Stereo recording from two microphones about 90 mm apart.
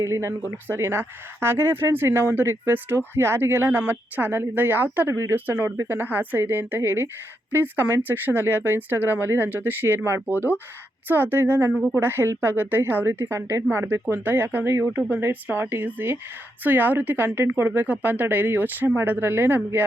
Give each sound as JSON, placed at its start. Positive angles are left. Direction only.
{"t": 0.0, "sound": "speech", "side_deg": -30}
{"t": 11.7, "sound": "speech", "side_deg": -5}
{"t": 11.9, "sound": "speech", "side_deg": -25}